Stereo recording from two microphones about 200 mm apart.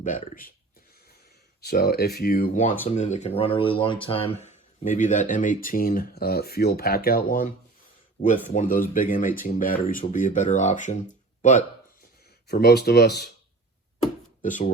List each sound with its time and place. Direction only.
0.0 s speech: 40° left (ahead or behind)
1.6 s speech: 50° left (ahead or behind)
12.5 s speech: 55° left (ahead or behind)
14.4 s speech: 40° left (ahead or behind)